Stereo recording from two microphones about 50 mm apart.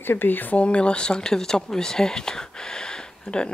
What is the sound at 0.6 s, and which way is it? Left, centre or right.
Speech, left.